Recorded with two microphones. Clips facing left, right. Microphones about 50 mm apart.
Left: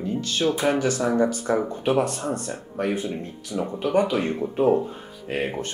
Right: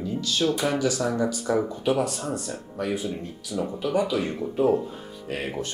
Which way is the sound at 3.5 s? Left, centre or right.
Centre.